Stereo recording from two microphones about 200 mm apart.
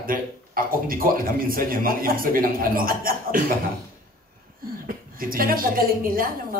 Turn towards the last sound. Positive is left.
turn(degrees=-45)  # may be behind; listen again after turning